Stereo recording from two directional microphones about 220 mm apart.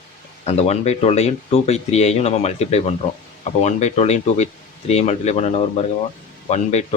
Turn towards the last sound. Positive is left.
turn(degrees=30)  # may be behind; listen again after turning